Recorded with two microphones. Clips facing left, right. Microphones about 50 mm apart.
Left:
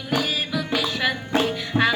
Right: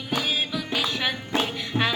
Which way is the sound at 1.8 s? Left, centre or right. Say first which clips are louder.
Left 4 dB; left.